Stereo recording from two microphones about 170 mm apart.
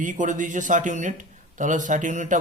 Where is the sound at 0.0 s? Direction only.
50° right (ahead or behind).